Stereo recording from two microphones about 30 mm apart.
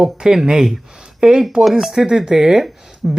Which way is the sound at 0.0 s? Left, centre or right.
Right.